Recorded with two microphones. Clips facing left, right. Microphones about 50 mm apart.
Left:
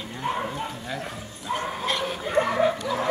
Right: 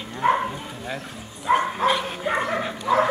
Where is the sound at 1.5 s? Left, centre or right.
Right.